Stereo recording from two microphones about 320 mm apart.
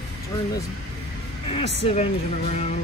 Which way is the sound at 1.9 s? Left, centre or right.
Centre.